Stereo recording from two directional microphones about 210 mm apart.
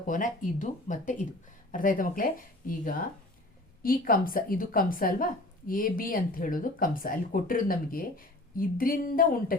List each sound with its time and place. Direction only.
0.0 s a woman's voice: 40° left (ahead or behind)